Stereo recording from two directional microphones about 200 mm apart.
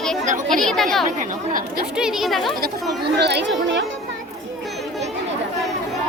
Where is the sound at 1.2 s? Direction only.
45° right (ahead or behind).